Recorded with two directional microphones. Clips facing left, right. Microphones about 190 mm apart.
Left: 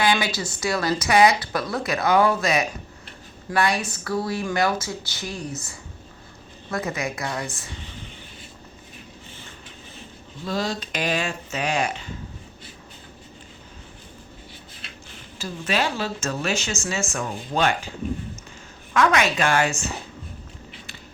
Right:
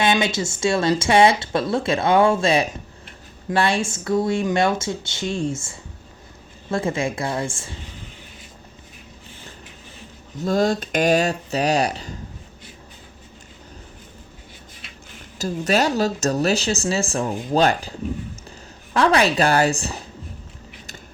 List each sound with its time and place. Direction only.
0.0 s speech: 25° right (ahead or behind)
10.4 s speech: 50° right (ahead or behind)
15.4 s speech: 40° right (ahead or behind)
18.9 s speech: 35° right (ahead or behind)